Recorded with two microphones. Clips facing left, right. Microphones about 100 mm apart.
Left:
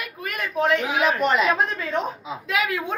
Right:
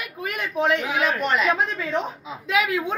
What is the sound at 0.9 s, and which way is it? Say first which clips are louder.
A woman's voice: left 2 dB; 15° left (ahead or behind).